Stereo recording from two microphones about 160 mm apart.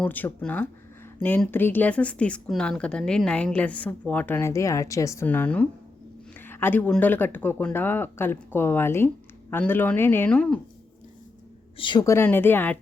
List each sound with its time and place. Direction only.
0.0 s a woman's voice: 10° left (ahead or behind)
11.8 s speech: 30° left (ahead or behind)
12.0 s a woman's voice: 15° left (ahead or behind)